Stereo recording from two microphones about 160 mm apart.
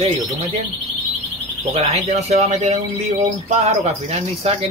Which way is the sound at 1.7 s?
40° right (ahead or behind).